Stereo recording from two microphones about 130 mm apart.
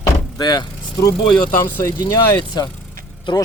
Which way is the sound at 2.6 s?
30° left (ahead or behind).